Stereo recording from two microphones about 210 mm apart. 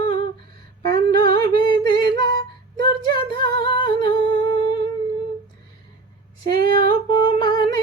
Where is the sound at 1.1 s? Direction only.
45° right (ahead or behind).